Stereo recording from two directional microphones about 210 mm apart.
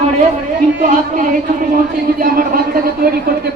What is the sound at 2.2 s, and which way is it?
Speech, 45° right (ahead or behind).